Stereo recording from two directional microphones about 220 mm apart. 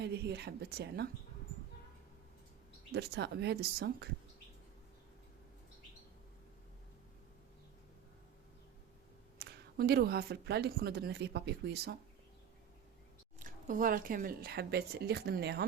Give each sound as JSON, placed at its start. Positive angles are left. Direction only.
{"t": 0.0, "sound": "speech", "side_deg": -50}
{"t": 2.9, "sound": "speech", "side_deg": -50}
{"t": 9.4, "sound": "speech", "side_deg": -45}
{"t": 13.4, "sound": "speech", "side_deg": -35}